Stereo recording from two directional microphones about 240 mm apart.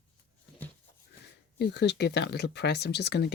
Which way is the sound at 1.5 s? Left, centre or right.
Left.